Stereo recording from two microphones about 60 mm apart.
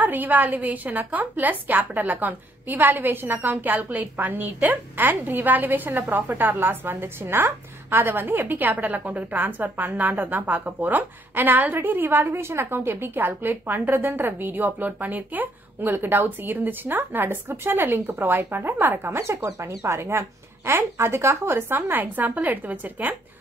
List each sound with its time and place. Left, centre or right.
0.0 s a woman's voice: right